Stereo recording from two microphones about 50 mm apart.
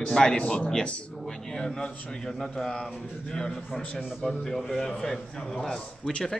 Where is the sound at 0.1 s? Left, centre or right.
Centre.